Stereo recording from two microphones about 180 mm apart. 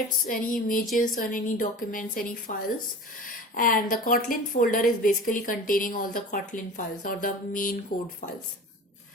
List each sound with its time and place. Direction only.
0.3 s a woman's voice: 50° left (ahead or behind)